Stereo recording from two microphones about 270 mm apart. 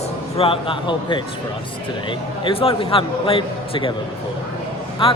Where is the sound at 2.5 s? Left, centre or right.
Left.